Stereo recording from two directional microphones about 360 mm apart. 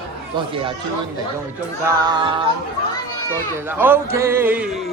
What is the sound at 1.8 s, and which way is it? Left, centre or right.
Music, centre.